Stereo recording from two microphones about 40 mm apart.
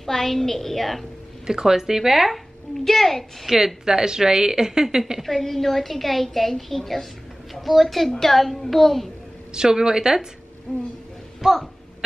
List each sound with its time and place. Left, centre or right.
0.0 s a woman's voice: centre
1.5 s a woman's voice: centre
3.4 s a woman's voice: centre
5.2 s a woman's voice: centre
9.5 s a woman's voice: centre
11.4 s a woman's voice: centre